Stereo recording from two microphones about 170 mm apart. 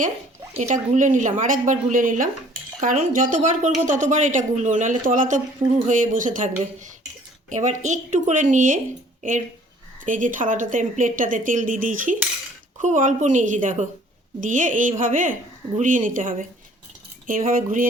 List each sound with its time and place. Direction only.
0.5 s a woman's voice: 45° right (ahead or behind)
7.5 s a woman's voice: 45° right (ahead or behind)
10.1 s a woman's voice: 50° right (ahead or behind)